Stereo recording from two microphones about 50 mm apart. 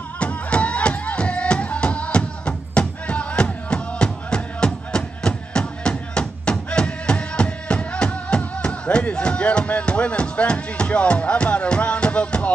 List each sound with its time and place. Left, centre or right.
0.2 s music: left